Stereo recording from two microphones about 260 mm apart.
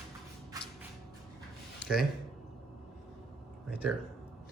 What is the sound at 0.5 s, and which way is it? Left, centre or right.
Shuffle, centre.